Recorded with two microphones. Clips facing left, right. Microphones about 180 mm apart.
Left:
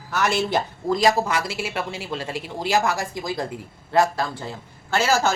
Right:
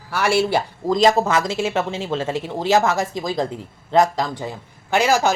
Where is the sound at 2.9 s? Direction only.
20° right (ahead or behind).